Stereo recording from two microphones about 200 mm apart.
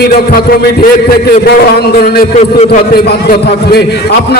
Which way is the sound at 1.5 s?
50° left (ahead or behind).